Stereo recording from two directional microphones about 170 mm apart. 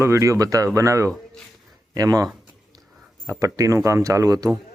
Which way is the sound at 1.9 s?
20° right (ahead or behind).